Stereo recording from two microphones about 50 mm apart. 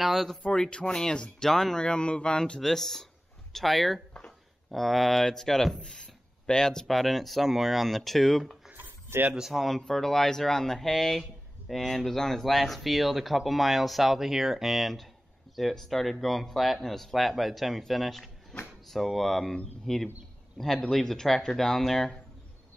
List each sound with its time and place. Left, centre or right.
0.0 s speech: centre
0.5 s speech: centre
2.6 s speech: centre
8.7 s a sound: right
9.5 s speech: centre
18.5 s speech: centre
18.9 s speech: centre